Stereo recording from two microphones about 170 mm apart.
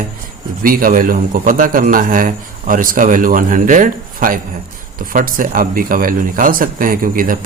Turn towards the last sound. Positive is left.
turn(degrees=-55)  # may be behind; listen again after turning